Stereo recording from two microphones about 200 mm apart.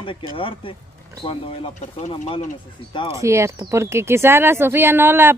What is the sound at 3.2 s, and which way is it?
Speech, 15° right (ahead or behind).